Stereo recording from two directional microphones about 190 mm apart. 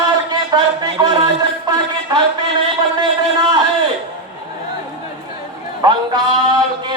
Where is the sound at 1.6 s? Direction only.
20° right (ahead or behind).